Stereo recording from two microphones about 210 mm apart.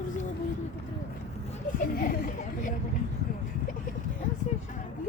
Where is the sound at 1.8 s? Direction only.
45° left (ahead or behind).